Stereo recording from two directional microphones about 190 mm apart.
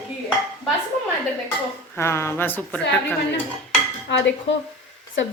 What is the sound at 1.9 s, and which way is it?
A woman's voice, 15° left (ahead or behind).